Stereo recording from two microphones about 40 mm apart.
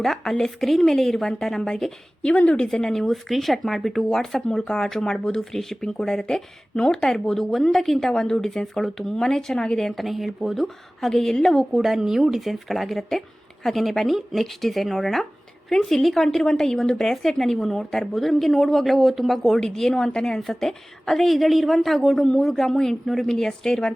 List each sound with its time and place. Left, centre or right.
0.0 s a woman's voice: centre
2.3 s speech: left
2.9 s a woman's voice: centre
6.7 s speech: left
7.1 s a woman's voice: centre
11.1 s a woman's voice: centre
11.7 s a woman's voice: centre
19.5 s a woman's voice: centre